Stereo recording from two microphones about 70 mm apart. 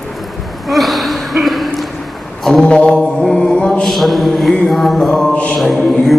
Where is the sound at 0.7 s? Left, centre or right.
Centre.